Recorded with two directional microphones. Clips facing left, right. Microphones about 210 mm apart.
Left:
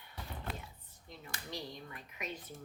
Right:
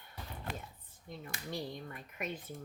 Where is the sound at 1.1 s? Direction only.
50° right (ahead or behind).